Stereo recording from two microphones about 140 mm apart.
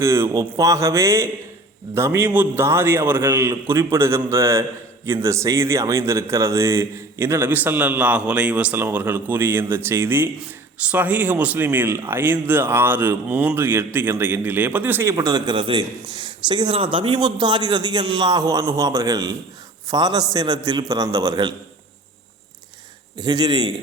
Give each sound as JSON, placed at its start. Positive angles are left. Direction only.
{"t": 0.0, "sound": "a man's voice", "side_deg": -20}
{"t": 23.1, "sound": "a man's voice", "side_deg": -30}